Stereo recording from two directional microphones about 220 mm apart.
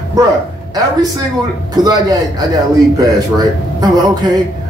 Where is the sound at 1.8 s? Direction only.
20° right (ahead or behind).